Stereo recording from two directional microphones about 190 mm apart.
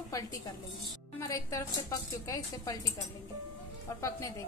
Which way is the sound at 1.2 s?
15° left (ahead or behind).